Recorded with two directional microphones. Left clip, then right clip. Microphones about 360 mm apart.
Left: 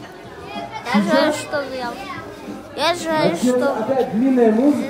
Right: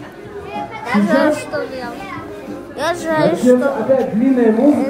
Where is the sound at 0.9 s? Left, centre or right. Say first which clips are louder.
Right 2 dB; centre.